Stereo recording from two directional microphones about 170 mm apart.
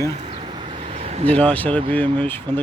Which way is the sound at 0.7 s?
35° right (ahead or behind).